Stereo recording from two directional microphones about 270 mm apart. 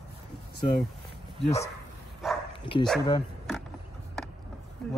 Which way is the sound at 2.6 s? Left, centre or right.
Centre.